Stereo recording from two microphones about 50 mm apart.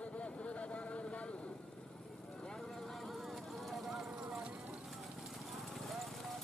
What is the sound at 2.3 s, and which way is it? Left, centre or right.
Clip-clop, centre.